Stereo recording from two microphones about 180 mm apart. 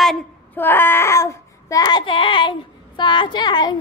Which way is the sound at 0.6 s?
10° left (ahead or behind).